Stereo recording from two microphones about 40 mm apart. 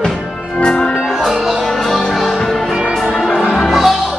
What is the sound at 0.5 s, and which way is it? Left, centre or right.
Music, left.